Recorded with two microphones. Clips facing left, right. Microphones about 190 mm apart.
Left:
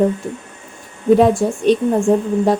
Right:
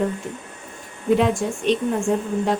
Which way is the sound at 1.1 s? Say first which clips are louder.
Left 7 dB; 40° left (ahead or behind).